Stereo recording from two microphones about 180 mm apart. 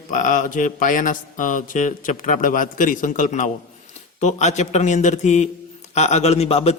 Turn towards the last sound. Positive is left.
turn(degrees=35)  # may be behind; listen again after turning